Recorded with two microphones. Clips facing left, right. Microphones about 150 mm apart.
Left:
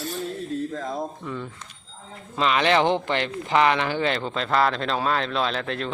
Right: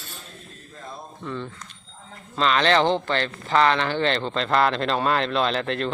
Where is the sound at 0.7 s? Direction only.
90° left.